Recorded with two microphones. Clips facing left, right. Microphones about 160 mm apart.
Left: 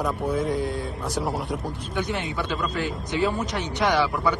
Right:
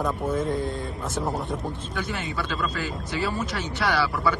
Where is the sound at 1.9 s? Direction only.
20° left (ahead or behind).